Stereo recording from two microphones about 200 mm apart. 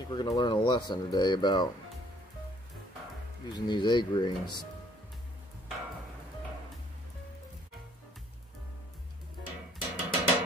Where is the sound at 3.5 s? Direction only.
20° left (ahead or behind).